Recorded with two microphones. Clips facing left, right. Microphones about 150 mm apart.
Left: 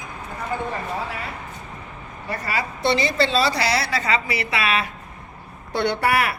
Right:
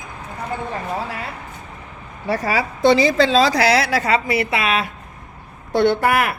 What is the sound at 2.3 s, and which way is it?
A woman's voice, 90° right.